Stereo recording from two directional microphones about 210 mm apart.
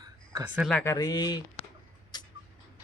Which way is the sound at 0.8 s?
15° left (ahead or behind).